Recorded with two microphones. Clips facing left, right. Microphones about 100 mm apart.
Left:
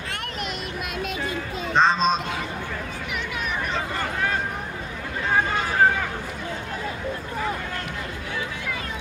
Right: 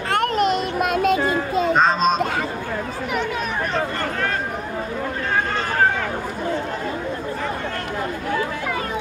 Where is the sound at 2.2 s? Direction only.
55° right (ahead or behind).